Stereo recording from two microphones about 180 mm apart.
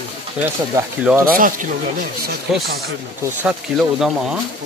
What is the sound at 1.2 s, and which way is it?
Speech, 50° right (ahead or behind).